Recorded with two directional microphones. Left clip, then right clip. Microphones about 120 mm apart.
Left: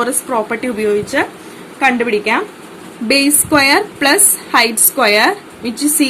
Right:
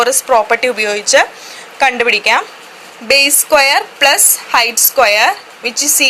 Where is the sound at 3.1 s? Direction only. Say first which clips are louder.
Right 3 dB; 25° right (ahead or behind).